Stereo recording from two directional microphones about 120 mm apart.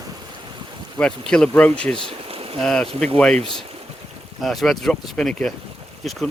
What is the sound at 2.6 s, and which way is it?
Speech, 5° left (ahead or behind).